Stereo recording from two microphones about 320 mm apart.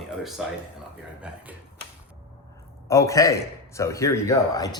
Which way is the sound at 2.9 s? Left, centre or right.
Centre.